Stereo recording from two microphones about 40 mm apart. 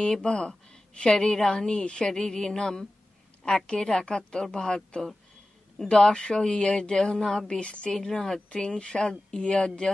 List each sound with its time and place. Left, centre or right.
0.2 s a woman's voice: left
7.5 s a woman's voice: left
7.9 s a woman's voice: centre
8.6 s a woman's voice: left